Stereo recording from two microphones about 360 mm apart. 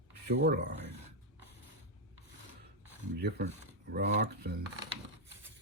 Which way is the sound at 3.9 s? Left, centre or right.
Right.